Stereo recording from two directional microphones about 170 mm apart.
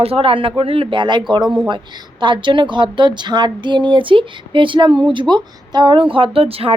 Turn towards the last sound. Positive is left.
turn(degrees=-35)  # may be behind; listen again after turning